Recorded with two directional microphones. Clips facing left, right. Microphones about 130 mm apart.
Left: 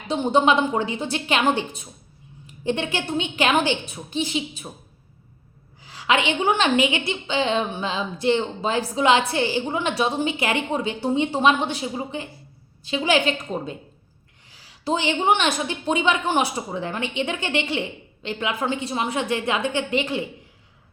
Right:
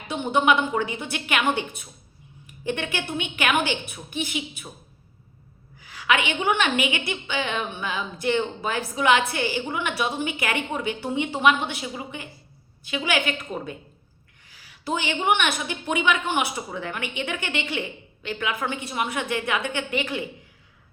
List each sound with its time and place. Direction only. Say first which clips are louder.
0.1 s a woman's voice: left 3 dB; 35° left (ahead or behind)
5.8 s a woman's voice: left 2 dB; 25° left (ahead or behind)